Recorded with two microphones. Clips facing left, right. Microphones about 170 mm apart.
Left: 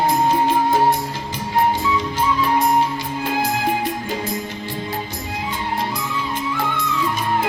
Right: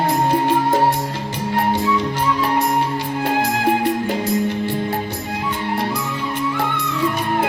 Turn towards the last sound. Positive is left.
turn(degrees=-65)  # may be behind; listen again after turning